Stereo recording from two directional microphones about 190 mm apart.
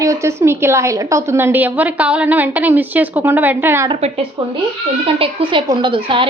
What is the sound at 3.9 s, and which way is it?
A woman's voice, 30° right (ahead or behind).